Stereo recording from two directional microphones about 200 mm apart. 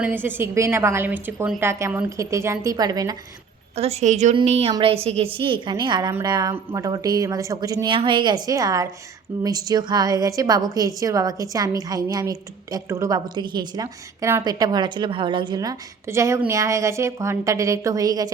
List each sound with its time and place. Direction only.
0.0 s a woman's voice: 10° right (ahead or behind)
3.8 s a woman's voice: 35° right (ahead or behind)